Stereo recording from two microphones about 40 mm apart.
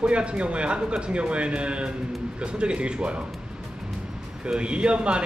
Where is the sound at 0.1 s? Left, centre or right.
Right.